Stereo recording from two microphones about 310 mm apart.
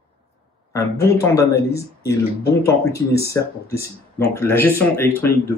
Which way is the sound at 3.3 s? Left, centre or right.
Centre.